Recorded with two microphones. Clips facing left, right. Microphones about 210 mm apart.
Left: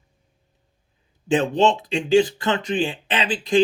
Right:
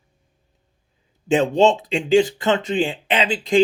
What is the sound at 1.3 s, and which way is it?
Speech, 20° right (ahead or behind).